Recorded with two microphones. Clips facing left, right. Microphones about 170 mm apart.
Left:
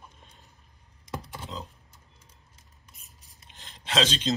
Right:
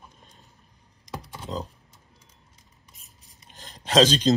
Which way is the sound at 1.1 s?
Centre (ahead or behind).